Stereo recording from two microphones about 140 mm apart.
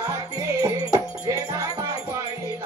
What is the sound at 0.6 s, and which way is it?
Music, 25° right (ahead or behind).